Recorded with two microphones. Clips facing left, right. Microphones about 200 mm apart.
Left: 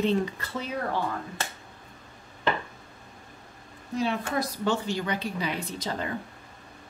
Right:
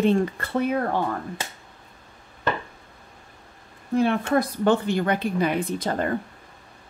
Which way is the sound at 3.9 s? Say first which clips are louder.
Right 7 dB; 55° right (ahead or behind).